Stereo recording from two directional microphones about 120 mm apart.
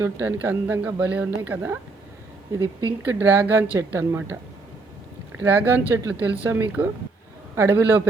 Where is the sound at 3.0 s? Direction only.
20° right (ahead or behind).